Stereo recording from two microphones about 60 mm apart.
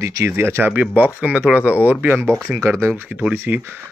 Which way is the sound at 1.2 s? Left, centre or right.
Right.